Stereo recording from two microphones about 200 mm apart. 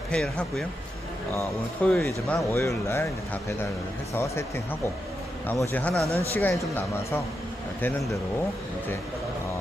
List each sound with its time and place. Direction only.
0.1 s speech: 5° left (ahead or behind)
4.1 s speech: 15° left (ahead or behind)
5.7 s speech: 5° left (ahead or behind)